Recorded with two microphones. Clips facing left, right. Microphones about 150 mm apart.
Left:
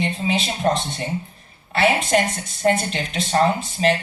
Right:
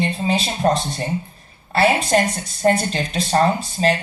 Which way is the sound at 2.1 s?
35° right (ahead or behind).